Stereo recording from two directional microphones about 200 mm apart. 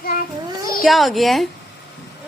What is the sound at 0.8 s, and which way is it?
Speech, centre (ahead or behind).